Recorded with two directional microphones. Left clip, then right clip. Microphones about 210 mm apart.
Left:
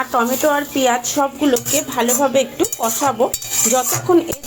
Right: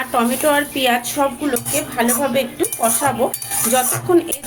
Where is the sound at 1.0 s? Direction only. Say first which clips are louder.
Left 2 dB; 20° left (ahead or behind).